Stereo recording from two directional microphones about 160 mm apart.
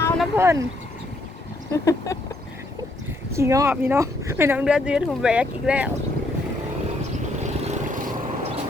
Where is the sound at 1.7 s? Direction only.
20° left (ahead or behind).